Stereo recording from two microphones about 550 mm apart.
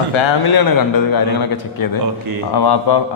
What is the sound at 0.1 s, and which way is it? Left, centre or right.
Speech, left.